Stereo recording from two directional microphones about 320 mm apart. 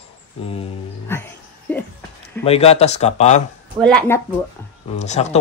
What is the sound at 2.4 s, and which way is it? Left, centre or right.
Speech, centre.